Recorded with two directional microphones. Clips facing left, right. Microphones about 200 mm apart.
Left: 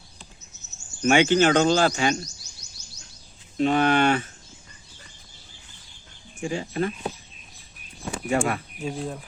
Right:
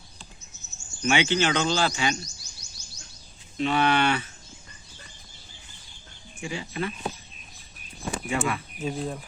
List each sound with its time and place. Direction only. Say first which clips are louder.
1.0 s speech: left 5 dB; 45° left (ahead or behind)
3.6 s speech: left 3 dB; 45° left (ahead or behind)
6.4 s speech: left 5 dB; 45° left (ahead or behind)
8.3 s speech: left 5 dB; 45° left (ahead or behind)
8.8 s speech: even; centre (ahead or behind)